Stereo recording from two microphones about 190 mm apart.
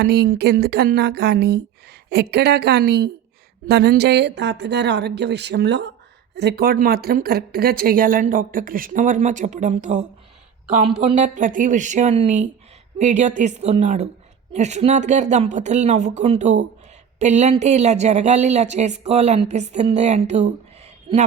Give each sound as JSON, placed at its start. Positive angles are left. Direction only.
{"t": 0.0, "sound": "speech", "side_deg": -55}